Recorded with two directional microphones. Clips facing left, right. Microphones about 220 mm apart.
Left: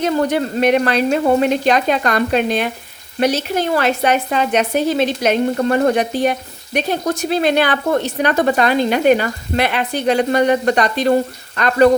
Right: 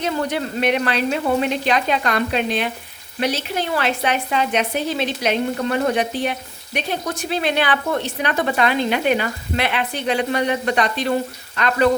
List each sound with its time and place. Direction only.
0.0 s speech: 45° left (ahead or behind)